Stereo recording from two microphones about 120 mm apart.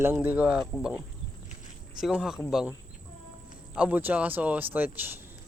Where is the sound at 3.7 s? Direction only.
10° right (ahead or behind).